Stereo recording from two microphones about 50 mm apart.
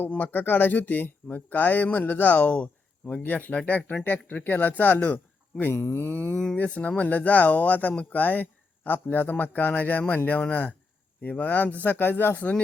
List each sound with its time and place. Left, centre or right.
0.0 s a man's voice: left
5.7 s speech: left